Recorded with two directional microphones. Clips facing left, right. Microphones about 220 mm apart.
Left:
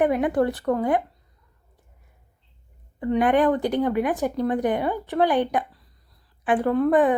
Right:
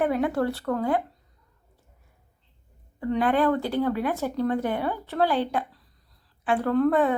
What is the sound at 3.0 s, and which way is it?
Speech, 15° left (ahead or behind).